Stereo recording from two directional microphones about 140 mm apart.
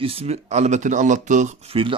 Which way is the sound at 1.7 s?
40° right (ahead or behind).